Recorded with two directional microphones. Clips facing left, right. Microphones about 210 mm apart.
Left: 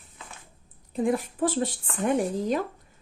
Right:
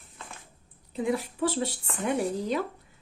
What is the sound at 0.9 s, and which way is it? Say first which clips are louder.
A woman's voice: left 3 dB; 50° left (ahead or behind).